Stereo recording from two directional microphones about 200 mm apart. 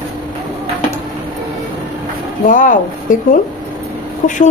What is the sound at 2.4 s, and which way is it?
A woman's voice, 40° left (ahead or behind).